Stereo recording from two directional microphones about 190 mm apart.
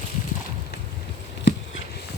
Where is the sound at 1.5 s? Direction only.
65° left (ahead or behind).